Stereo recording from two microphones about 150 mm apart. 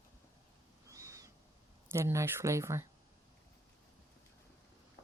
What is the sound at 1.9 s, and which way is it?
Speech, 15° right (ahead or behind).